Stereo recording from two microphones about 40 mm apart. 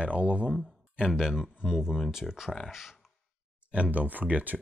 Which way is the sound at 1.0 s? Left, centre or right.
Centre.